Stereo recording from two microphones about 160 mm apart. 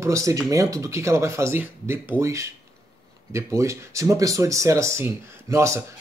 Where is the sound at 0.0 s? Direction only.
20° right (ahead or behind).